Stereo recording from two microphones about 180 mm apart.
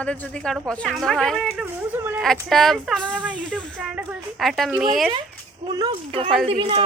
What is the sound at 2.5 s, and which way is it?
Speech, centre (ahead or behind).